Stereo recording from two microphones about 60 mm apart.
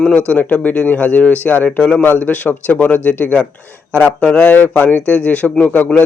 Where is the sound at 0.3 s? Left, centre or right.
Centre.